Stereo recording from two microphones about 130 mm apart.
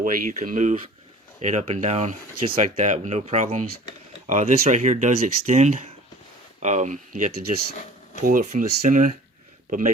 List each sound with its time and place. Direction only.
0.0 s speech: 80° right; by 2.1 s 65° right (ahead or behind)
2.6 s speech: 85° right
8.2 s speech: 90° right